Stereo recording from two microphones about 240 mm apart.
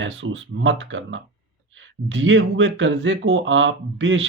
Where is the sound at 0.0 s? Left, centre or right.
Right.